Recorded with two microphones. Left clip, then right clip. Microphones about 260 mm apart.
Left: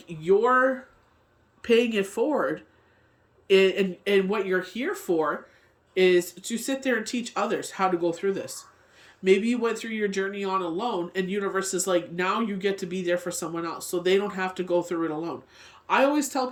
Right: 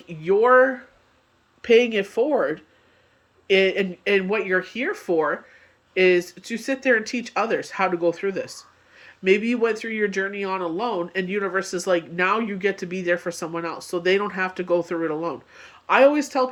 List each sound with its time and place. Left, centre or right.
0.1 s speech: centre